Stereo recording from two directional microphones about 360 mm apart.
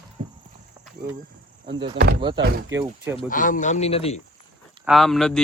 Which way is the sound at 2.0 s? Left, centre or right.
Right.